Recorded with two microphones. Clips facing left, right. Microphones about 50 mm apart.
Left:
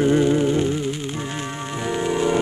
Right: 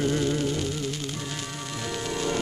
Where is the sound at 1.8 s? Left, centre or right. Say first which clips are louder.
Left 9 dB; left.